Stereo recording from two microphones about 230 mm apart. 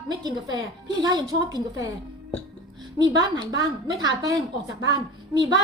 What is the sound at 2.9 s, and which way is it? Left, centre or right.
A woman's voice, centre.